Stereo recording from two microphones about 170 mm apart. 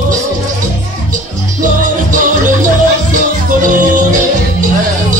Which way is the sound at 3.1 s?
50° right (ahead or behind).